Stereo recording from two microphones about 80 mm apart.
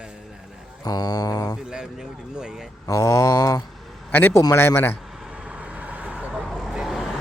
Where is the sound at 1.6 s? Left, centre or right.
Centre.